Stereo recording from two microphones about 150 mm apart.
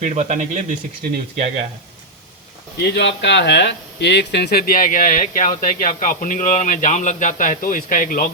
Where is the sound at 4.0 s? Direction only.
90° left; by 8.3 s 65° left (ahead or behind).